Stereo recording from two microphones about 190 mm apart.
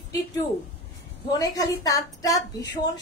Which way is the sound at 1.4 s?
20° left (ahead or behind).